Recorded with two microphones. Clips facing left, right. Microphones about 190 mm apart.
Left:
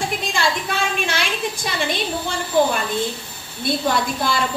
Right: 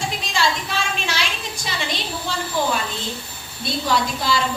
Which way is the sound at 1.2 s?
55° left (ahead or behind).